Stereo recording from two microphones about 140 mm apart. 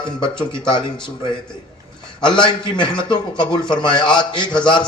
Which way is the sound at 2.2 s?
35° left (ahead or behind).